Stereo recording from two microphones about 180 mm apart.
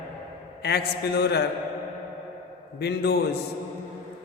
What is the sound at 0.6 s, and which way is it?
Mantra, 65° left (ahead or behind).